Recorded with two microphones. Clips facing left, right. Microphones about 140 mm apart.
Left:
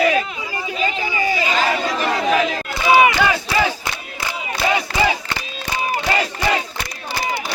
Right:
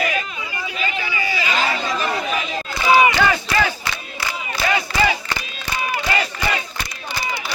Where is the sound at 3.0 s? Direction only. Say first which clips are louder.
Left 1 dB; 10° left (ahead or behind).